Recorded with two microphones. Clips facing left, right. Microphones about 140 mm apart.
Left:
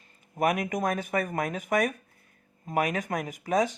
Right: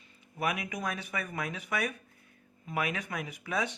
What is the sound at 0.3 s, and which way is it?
Speech, 45° left (ahead or behind).